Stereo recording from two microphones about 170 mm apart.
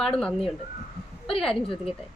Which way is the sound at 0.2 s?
5° left (ahead or behind).